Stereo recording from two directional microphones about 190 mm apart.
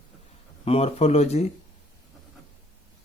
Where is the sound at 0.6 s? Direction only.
30° left (ahead or behind).